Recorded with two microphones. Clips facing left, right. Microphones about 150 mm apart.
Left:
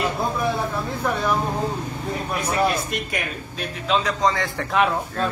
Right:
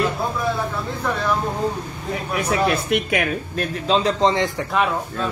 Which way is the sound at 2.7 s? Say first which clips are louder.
Right 6 dB; 65° right (ahead or behind).